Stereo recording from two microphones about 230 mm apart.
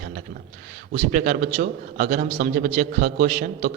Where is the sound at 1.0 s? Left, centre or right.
Right.